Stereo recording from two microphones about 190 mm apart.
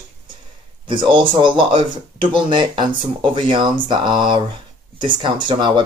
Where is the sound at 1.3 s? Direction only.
25° right (ahead or behind).